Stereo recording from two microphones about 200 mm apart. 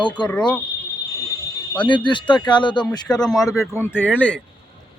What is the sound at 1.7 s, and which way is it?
Speech, 25° left (ahead or behind).